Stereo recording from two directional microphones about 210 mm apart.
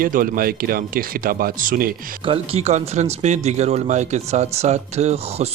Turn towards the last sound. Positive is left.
turn(degrees=-30)  # may be behind; listen again after turning